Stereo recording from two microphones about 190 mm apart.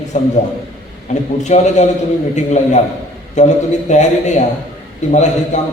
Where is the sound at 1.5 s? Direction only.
40° left (ahead or behind).